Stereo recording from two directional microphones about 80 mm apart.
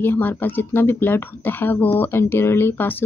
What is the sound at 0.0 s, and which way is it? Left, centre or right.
Speech, left.